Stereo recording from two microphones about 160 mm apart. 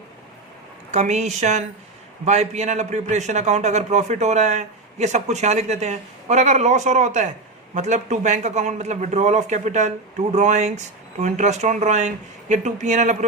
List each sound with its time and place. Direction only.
0.9 s a man's voice: 45° right (ahead or behind)